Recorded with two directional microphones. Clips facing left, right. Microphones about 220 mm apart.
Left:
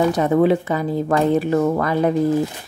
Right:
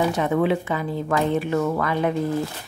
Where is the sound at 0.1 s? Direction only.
40° left (ahead or behind).